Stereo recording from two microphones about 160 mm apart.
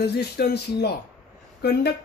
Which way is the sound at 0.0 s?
90° left.